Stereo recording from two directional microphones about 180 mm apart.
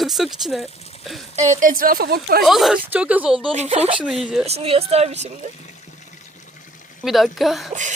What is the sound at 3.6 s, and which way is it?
Speech, 35° right (ahead or behind).